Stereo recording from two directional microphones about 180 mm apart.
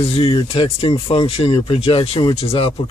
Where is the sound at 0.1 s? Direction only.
30° left (ahead or behind).